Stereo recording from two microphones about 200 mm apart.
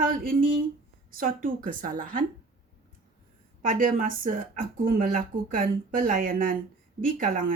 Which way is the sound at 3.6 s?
45° right (ahead or behind).